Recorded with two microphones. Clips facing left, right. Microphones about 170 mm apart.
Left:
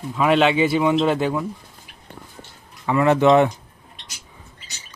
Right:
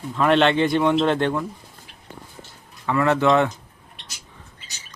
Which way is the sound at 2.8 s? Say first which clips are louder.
Left 3 dB; 15° left (ahead or behind).